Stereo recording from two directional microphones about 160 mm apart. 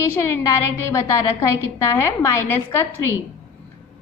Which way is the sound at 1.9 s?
15° left (ahead or behind).